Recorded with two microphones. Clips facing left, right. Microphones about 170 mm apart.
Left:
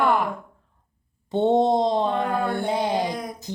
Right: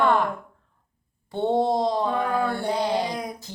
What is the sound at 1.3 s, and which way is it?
Mantra, 20° left (ahead or behind).